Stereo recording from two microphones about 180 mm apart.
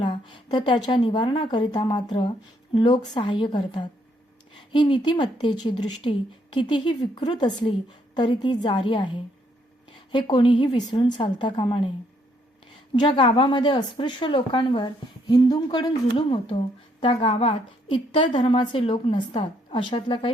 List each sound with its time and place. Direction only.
0.0 s speech: 25° left (ahead or behind)
13.0 s speech: 30° left (ahead or behind)